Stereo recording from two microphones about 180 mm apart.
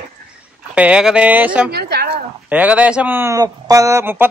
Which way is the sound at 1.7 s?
60° right (ahead or behind).